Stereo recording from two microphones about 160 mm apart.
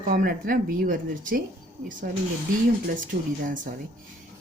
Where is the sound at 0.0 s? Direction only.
55° right (ahead or behind).